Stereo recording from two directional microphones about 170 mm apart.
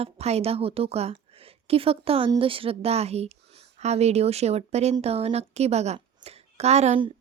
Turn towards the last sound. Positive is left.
turn(degrees=-40)  # may be behind; listen again after turning